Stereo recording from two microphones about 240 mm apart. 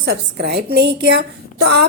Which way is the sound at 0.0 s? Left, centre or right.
Right.